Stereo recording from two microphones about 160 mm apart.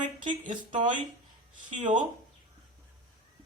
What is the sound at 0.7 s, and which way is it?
A woman's voice, 55° right (ahead or behind).